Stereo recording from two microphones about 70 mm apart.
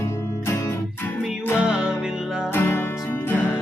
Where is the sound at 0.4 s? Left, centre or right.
Left.